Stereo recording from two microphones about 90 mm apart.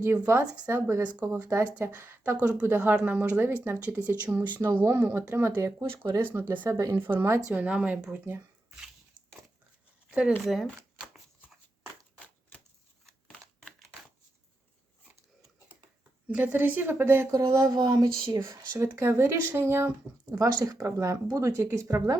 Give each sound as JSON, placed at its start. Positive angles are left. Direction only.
{"t": 0.0, "sound": "speech", "side_deg": -30}
{"t": 6.7, "sound": "speech", "side_deg": -40}
{"t": 6.9, "sound": "speech", "side_deg": -25}
{"t": 7.5, "sound": "speech", "side_deg": -15}
{"t": 10.1, "sound": "speech", "side_deg": -10}
{"t": 12.2, "sound": "typewriter", "side_deg": 10}
{"t": 16.3, "sound": "speech", "side_deg": -20}
{"t": 17.3, "sound": "speech", "side_deg": -45}
{"t": 20.3, "sound": "speech", "side_deg": -45}